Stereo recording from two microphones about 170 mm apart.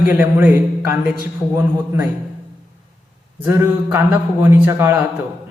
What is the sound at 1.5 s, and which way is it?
Speech, 15° right (ahead or behind).